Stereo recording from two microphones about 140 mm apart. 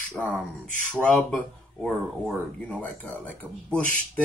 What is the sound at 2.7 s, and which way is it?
Speech, 10° left (ahead or behind).